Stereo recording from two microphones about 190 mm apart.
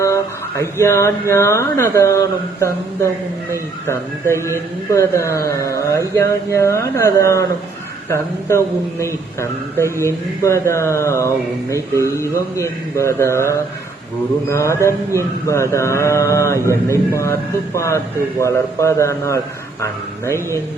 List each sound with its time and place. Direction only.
0.0 s speech: 15° left (ahead or behind)
4.4 s speech: 15° left (ahead or behind)
14.5 s speech: 15° left (ahead or behind)
16.6 s a man's voice: 15° right (ahead or behind)
17.1 s speech: 15° left (ahead or behind)